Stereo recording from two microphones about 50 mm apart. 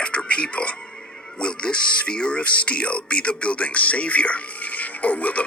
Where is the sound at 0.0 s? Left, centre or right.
Left.